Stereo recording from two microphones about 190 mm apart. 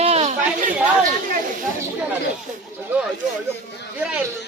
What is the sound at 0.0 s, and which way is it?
Chatter, 35° right (ahead or behind).